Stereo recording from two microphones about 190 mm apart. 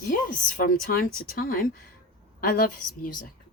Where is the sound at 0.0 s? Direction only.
45° left (ahead or behind).